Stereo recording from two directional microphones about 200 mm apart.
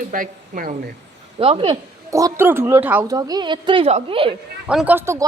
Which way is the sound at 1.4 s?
30° right (ahead or behind).